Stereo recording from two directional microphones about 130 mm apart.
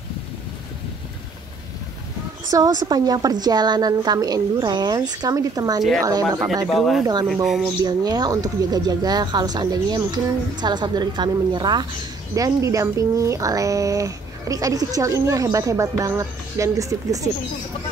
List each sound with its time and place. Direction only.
2.5 s speech: 30° right (ahead or behind)
6.7 s speech: centre (ahead or behind)
7.8 s speech: 30° right (ahead or behind)